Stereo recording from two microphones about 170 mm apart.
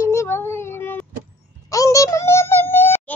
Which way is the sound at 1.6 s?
20° left (ahead or behind).